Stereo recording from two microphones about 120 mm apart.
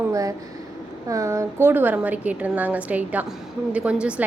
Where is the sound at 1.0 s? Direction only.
25° right (ahead or behind).